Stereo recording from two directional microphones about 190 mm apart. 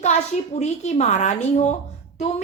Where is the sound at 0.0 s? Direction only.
35° left (ahead or behind).